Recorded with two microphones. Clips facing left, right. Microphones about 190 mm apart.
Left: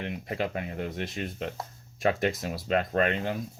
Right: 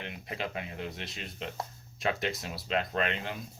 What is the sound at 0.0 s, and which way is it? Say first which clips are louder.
Speech: left 6 dB; 45° left (ahead or behind).